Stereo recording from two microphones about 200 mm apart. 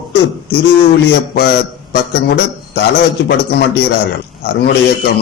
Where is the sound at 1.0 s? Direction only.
55° left (ahead or behind).